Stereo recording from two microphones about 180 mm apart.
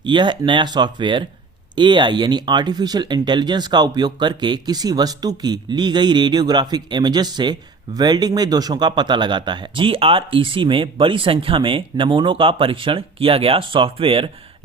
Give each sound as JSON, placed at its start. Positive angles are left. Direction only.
{"t": 0.0, "sound": "speech", "side_deg": -25}